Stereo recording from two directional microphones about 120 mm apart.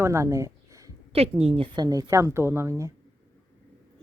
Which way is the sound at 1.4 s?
60° right (ahead or behind).